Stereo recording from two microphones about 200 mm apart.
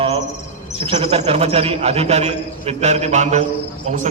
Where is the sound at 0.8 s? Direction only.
30° right (ahead or behind).